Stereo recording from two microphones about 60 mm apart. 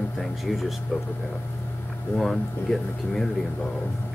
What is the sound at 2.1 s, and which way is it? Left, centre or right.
Speech, centre.